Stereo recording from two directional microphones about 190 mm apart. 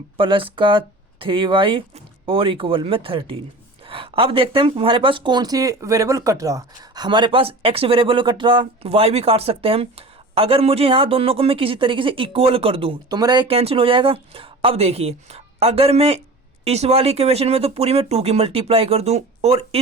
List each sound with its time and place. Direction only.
0.2 s speech: 25° right (ahead or behind)
13.5 s speech: 30° right (ahead or behind)